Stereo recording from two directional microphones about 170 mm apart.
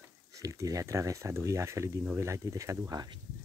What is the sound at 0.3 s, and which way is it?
Speech, 20° right (ahead or behind).